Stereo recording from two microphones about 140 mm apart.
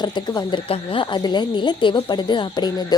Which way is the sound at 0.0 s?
30° left (ahead or behind).